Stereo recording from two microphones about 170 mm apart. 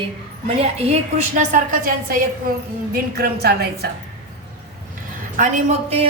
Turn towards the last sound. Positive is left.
turn(degrees=-40)  # may be behind; listen again after turning